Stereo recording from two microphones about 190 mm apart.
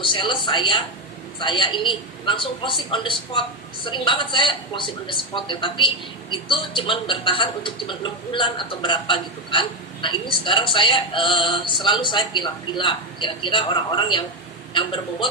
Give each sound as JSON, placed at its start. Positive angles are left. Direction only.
{"t": 0.0, "sound": "speech", "side_deg": 25}